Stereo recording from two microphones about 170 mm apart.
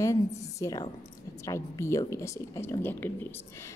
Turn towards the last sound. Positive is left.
turn(degrees=10)  # may be behind; listen again after turning